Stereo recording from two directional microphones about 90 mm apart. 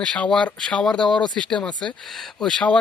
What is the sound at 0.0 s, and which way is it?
Speech, 10° left (ahead or behind).